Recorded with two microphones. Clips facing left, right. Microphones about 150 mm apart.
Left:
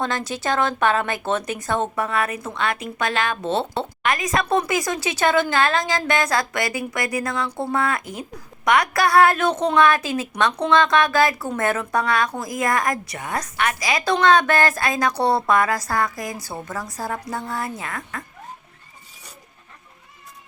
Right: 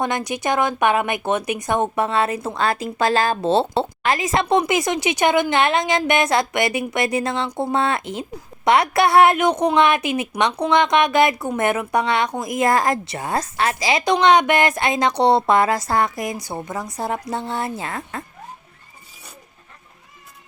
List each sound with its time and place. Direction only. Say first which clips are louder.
0.0 s speech: right 2 dB; 15° right (ahead or behind)
2.0 s a woman's voice: right 4 dB; 30° right (ahead or behind)